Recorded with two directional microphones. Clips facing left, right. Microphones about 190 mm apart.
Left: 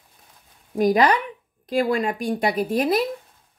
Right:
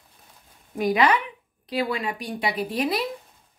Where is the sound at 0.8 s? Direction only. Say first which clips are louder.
Left 3 dB; 40° left (ahead or behind).